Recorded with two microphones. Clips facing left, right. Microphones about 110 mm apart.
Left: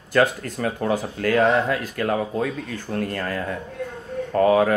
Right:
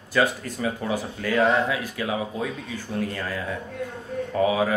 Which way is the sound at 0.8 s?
55° left (ahead or behind).